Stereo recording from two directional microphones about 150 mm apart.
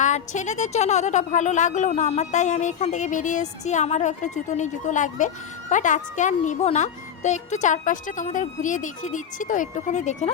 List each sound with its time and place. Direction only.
0.0 s a woman's voice: 50° left (ahead or behind)